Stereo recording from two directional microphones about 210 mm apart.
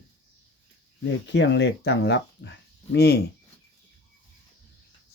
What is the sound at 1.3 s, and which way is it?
Speech, 55° left (ahead or behind).